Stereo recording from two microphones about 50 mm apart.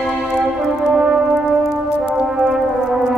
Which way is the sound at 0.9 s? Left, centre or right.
Centre.